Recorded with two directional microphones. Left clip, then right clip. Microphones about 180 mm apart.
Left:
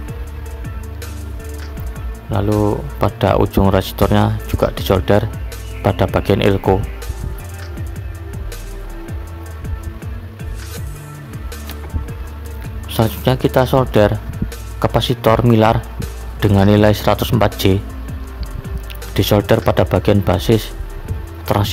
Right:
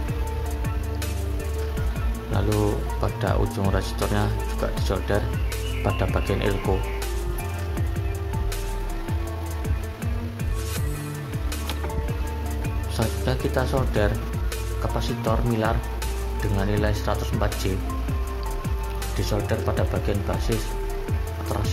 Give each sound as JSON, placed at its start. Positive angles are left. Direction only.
{"t": 2.3, "sound": "speech", "side_deg": 40}
{"t": 12.9, "sound": "speech", "side_deg": 55}
{"t": 19.1, "sound": "speech", "side_deg": 60}